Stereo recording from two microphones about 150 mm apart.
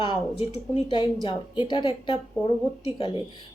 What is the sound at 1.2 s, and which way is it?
Speech, 30° left (ahead or behind).